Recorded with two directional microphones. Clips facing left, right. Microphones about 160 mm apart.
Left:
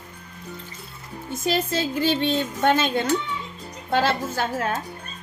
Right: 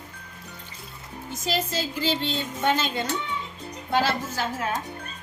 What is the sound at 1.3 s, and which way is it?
A woman's voice, 55° left (ahead or behind).